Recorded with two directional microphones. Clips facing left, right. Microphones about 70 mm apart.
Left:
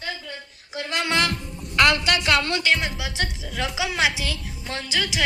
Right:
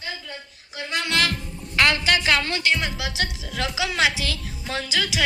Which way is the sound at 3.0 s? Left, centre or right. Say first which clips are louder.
Right 1 dB; centre.